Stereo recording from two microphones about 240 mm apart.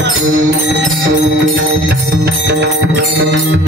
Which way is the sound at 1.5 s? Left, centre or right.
Right.